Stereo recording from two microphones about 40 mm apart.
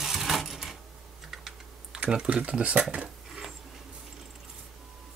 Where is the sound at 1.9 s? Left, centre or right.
Right.